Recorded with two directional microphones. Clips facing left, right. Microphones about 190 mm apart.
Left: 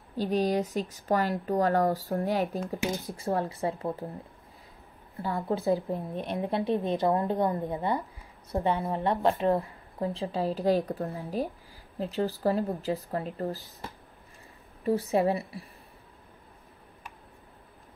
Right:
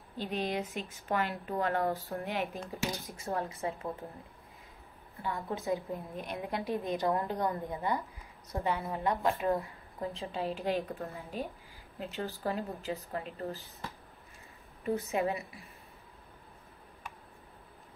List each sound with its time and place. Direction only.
0.2 s speech: 40° left (ahead or behind)
5.2 s speech: 35° left (ahead or behind)